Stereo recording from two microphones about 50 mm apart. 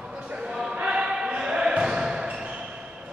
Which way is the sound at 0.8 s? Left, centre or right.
Centre.